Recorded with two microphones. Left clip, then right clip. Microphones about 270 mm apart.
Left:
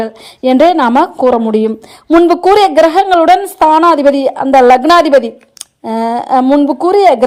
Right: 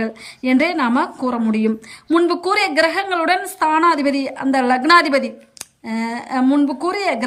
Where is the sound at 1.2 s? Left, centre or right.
Left.